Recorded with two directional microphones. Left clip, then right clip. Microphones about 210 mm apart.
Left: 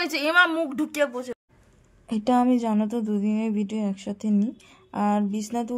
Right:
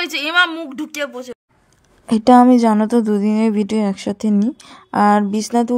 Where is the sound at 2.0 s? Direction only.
25° right (ahead or behind).